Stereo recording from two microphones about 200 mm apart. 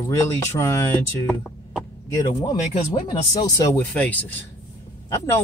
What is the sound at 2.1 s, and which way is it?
Speech, 20° left (ahead or behind).